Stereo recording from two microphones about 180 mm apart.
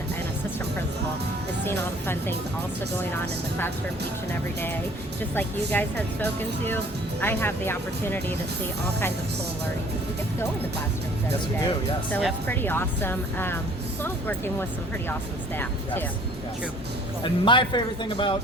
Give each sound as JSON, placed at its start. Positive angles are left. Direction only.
{"t": 3.0, "sound": "speech", "side_deg": 10}
{"t": 5.3, "sound": "speech", "side_deg": 10}
{"t": 12.1, "sound": "speech", "side_deg": 10}
{"t": 17.2, "sound": "speech", "side_deg": 25}